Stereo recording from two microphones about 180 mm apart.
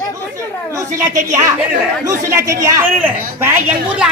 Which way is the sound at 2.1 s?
15° right (ahead or behind).